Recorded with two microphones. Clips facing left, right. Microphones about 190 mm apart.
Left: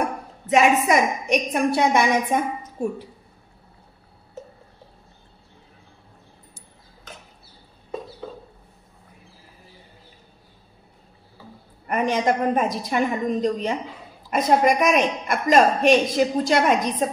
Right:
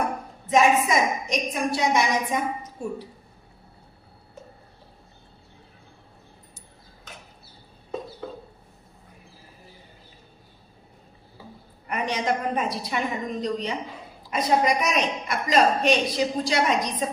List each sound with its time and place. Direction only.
0.5 s a woman's voice: 65° left (ahead or behind)
11.9 s a woman's voice: 50° left (ahead or behind)